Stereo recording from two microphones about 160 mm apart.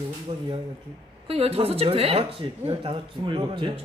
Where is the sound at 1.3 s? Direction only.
40° right (ahead or behind).